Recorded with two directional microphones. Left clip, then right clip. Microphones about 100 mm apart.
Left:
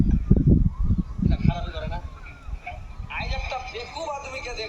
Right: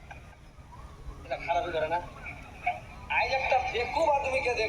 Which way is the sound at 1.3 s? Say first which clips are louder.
Right 7 dB; 45° right (ahead or behind).